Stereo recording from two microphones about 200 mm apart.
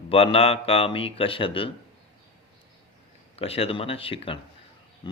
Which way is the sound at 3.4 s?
30° left (ahead or behind).